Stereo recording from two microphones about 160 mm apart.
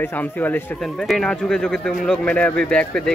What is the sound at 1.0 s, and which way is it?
Speech, 5° left (ahead or behind).